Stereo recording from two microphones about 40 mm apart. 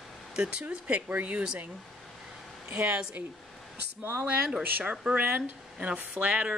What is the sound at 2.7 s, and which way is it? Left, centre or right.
Speech, right.